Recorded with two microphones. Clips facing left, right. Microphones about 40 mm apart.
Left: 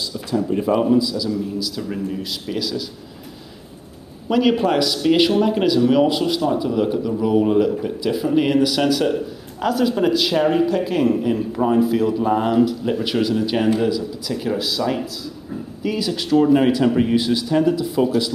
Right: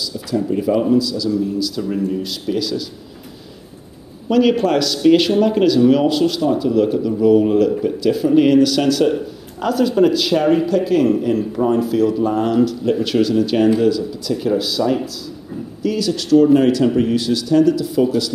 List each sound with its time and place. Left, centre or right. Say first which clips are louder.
0.6 s speech: right 1 dB; centre
4.3 s speech: right 3 dB; centre
15.8 s speech: right 3 dB; centre